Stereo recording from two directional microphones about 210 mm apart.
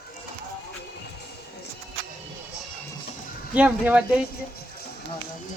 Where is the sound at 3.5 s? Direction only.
5° right (ahead or behind).